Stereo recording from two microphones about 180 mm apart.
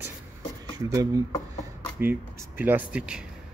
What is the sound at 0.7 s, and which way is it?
Speech, 20° right (ahead or behind).